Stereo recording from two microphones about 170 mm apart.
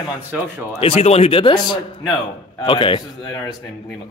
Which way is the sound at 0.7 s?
35° left (ahead or behind).